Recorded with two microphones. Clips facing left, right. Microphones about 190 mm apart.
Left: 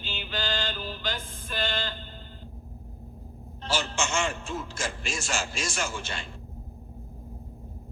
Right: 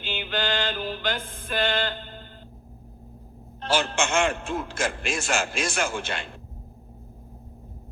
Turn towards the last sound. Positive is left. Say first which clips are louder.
# right 5 dB
turn(degrees=-55)  # may be behind; listen again after turning